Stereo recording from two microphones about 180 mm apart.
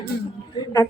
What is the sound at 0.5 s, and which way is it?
Speech, 20° left (ahead or behind).